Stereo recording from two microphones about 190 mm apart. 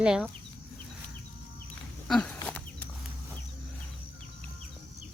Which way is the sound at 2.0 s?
5° left (ahead or behind).